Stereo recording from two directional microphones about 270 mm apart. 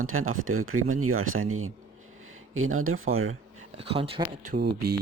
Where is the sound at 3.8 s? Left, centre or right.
Right.